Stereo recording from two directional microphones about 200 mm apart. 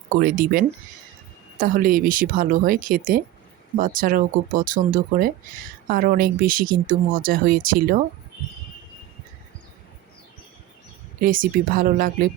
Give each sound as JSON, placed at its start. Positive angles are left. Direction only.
{"t": 0.2, "sound": "speech", "side_deg": -45}
{"t": 11.2, "sound": "speech", "side_deg": -45}